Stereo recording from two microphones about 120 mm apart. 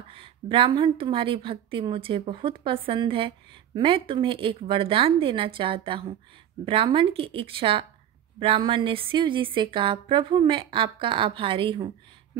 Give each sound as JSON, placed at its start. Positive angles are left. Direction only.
{"t": 0.1, "sound": "a woman's voice", "side_deg": -50}